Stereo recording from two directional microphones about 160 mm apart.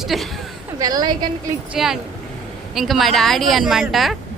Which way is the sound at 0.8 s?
25° right (ahead or behind).